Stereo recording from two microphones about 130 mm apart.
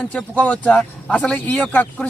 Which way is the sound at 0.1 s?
10° left (ahead or behind).